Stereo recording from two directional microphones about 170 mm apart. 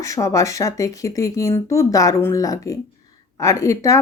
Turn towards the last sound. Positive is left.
turn(degrees=20)  # may be behind; listen again after turning